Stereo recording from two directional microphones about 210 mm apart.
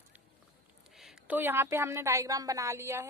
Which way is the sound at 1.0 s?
5° right (ahead or behind).